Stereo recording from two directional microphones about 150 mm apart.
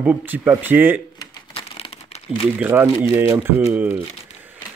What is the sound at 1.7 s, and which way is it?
Crumpling, 40° left (ahead or behind).